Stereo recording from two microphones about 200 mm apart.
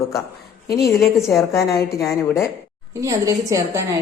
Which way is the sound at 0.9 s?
Centre (ahead or behind).